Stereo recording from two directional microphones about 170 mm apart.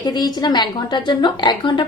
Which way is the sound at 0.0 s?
25° left (ahead or behind).